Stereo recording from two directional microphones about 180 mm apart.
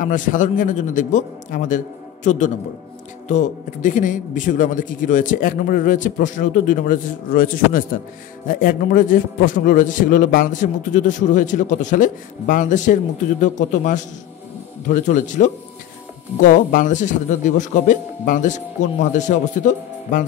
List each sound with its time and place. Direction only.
0.0 s a man's voice: 45° left (ahead or behind)